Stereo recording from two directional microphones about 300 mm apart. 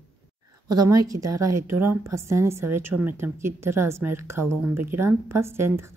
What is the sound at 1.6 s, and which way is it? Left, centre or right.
Speech, right.